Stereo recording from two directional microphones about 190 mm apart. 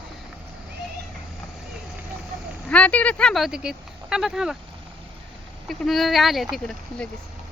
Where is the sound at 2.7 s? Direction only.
5° left (ahead or behind).